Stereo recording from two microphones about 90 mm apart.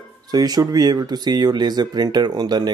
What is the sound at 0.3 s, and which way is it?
Speech, 45° right (ahead or behind).